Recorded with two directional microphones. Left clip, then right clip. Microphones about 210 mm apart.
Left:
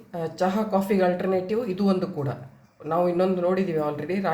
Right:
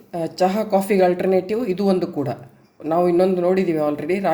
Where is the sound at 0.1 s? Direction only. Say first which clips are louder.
Right 6 dB; 35° right (ahead or behind).